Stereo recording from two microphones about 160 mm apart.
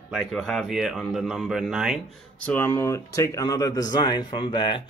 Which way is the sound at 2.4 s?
15° left (ahead or behind).